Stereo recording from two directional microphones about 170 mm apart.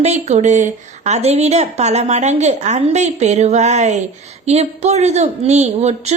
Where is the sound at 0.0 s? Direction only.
40° right (ahead or behind).